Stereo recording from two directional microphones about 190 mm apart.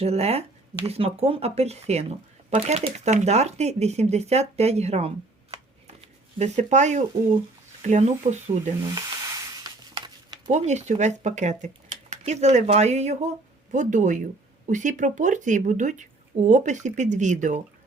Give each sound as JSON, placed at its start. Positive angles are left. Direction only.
{"t": 0.0, "sound": "speech", "side_deg": -35}
{"t": 8.8, "sound": "speech", "side_deg": -20}